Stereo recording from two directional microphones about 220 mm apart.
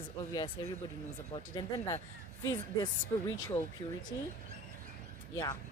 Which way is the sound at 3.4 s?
15° left (ahead or behind).